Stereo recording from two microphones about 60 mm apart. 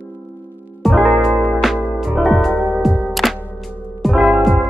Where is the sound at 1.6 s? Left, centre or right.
Centre.